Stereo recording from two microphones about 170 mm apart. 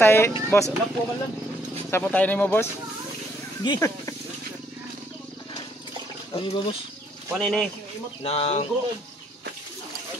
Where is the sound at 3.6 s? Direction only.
25° left (ahead or behind).